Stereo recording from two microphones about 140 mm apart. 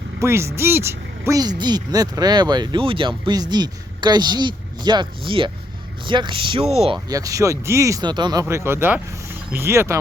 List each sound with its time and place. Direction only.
0.2 s speech: 20° right (ahead or behind); by 7.0 s 45° right (ahead or behind)
7.1 s speech: 25° right (ahead or behind)